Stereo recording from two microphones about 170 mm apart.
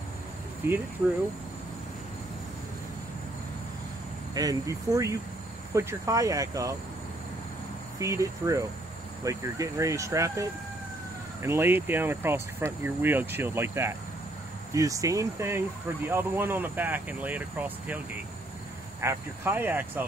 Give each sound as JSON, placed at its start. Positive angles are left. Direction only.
{"t": 0.6, "sound": "speech", "side_deg": -10}
{"t": 4.3, "sound": "speech", "side_deg": -20}
{"t": 8.0, "sound": "speech", "side_deg": -20}
{"t": 11.4, "sound": "speech", "side_deg": -15}